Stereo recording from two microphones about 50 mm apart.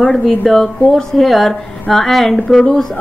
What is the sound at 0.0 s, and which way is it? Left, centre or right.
A woman's voice, centre.